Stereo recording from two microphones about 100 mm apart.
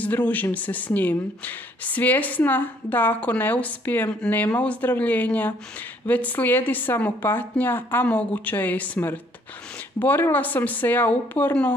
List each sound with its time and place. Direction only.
0.0 s speech: 15° left (ahead or behind)